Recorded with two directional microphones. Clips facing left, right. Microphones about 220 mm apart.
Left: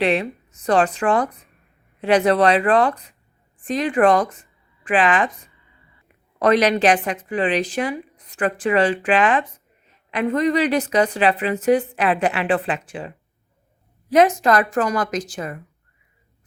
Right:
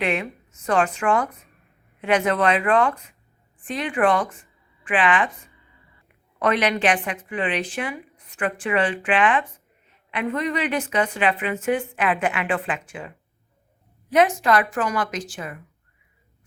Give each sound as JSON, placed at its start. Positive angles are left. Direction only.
{"t": 0.0, "sound": "a woman's voice", "side_deg": 35}
{"t": 6.4, "sound": "a woman's voice", "side_deg": 40}